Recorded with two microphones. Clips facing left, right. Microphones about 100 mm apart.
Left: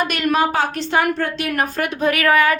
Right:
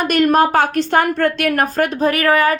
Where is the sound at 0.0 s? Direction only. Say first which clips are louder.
Right 5 dB; 45° right (ahead or behind).